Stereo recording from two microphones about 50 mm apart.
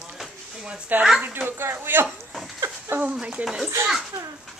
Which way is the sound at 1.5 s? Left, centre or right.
Right.